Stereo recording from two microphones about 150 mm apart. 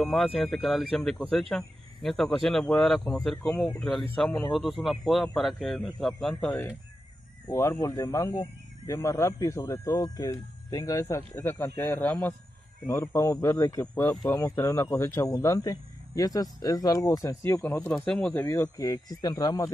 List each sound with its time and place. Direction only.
0.0 s speech: 5° left (ahead or behind)
18.3 s speech: 20° left (ahead or behind)